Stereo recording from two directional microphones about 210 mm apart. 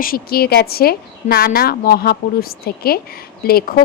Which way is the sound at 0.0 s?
45° left (ahead or behind).